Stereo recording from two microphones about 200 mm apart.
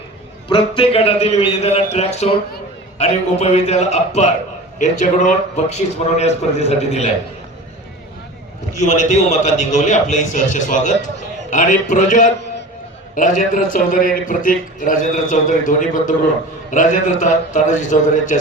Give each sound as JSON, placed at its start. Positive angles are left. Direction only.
{"t": 0.8, "sound": "a man's voice", "side_deg": 30}
{"t": 8.8, "sound": "a man's voice", "side_deg": 35}